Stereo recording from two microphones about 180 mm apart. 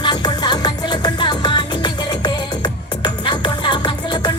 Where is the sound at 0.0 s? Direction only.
25° left (ahead or behind).